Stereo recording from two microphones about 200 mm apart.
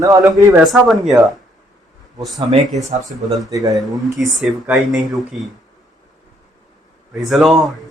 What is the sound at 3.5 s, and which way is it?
Speech, 15° right (ahead or behind).